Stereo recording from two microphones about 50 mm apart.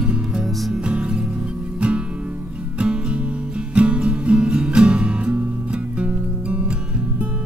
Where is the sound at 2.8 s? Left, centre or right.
Right.